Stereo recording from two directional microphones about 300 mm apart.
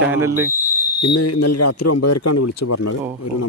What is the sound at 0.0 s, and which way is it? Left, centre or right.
Speech, centre.